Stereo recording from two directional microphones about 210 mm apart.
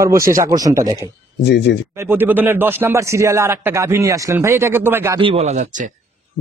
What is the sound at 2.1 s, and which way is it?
Speech, 10° right (ahead or behind).